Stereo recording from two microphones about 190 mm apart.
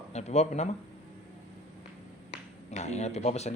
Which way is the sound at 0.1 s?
35° left (ahead or behind).